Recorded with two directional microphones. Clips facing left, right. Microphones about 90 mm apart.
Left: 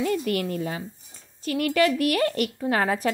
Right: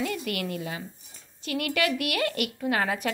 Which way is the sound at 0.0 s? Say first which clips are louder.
Left 5 dB; 35° left (ahead or behind).